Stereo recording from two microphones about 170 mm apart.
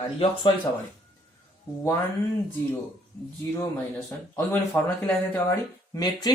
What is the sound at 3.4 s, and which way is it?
Speech, 20° left (ahead or behind).